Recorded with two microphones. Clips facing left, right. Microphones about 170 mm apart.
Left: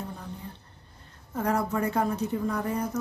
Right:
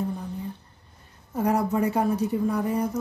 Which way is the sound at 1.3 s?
15° right (ahead or behind).